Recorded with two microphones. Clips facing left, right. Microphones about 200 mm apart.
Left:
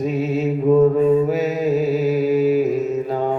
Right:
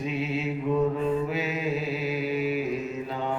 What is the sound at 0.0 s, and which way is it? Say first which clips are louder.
Mantra: left 9 dB; 45° left (ahead or behind).